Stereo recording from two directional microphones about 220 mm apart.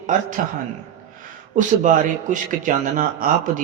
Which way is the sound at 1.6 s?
35° right (ahead or behind).